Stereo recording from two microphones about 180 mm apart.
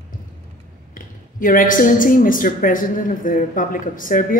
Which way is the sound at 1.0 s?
50° left (ahead or behind).